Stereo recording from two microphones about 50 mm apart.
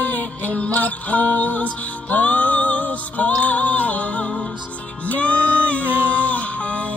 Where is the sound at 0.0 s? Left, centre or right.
Left.